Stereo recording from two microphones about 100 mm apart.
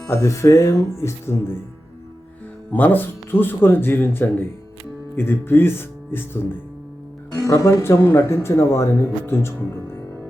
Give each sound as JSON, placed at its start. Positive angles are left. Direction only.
{"t": 0.1, "sound": "speech", "side_deg": 30}
{"t": 2.7, "sound": "speech", "side_deg": 20}
{"t": 7.3, "sound": "speech", "side_deg": 35}